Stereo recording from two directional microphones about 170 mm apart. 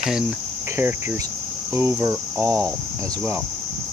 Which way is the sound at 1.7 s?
15° right (ahead or behind).